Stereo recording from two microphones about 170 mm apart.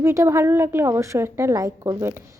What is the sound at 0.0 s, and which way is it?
A woman's voice, 15° right (ahead or behind).